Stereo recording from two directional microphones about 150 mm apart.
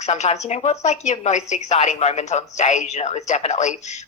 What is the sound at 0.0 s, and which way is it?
Speech, 50° left (ahead or behind).